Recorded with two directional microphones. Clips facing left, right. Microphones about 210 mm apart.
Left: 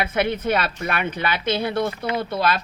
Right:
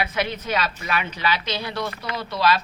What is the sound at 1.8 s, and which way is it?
Speech, 25° left (ahead or behind).